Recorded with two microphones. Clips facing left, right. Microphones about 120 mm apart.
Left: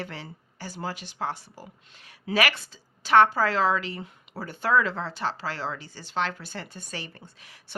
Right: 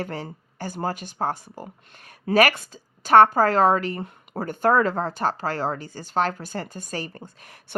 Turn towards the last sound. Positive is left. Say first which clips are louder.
# right 5 dB
turn(degrees=-50)  # may be behind; listen again after turning